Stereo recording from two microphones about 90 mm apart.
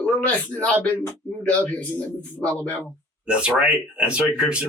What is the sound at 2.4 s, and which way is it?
Speech, 15° left (ahead or behind).